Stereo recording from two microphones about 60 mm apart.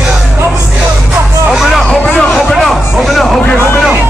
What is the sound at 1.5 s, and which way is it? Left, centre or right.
Music, centre.